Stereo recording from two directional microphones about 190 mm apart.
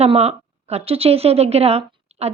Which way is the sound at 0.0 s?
35° right (ahead or behind).